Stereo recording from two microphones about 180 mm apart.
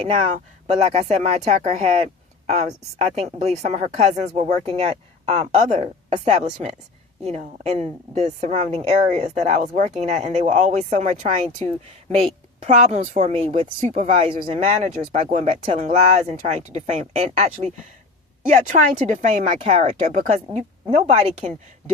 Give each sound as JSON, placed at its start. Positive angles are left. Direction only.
{"t": 0.0, "sound": "a woman's voice", "side_deg": -35}
{"t": 12.6, "sound": "a woman's voice", "side_deg": -40}